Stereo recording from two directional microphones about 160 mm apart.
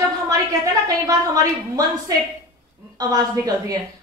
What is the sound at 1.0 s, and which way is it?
A woman's voice, 20° right (ahead or behind).